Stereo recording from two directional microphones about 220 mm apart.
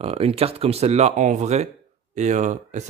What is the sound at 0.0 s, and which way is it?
A man's voice, 25° right (ahead or behind).